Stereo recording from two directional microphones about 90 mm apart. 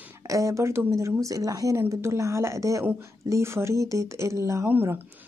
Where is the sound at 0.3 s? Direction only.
35° right (ahead or behind).